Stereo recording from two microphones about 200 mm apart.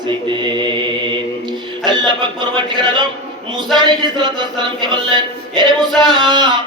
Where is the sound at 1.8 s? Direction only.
20° right (ahead or behind).